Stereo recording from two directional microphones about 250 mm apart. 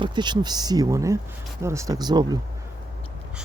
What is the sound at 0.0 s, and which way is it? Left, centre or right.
Speech, centre.